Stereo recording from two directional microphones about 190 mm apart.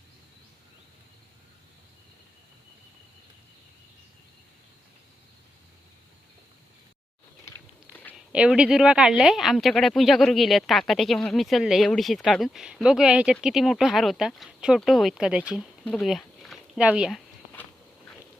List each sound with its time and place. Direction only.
8.1 s speech: 5° right (ahead or behind)